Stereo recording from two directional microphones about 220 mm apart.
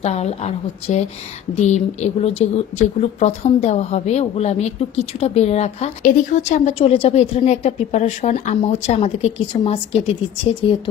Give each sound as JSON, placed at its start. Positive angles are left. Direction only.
{"t": 0.0, "sound": "a woman's voice", "side_deg": 30}